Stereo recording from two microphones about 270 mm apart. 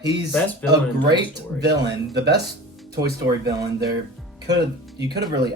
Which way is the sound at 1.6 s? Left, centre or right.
Right.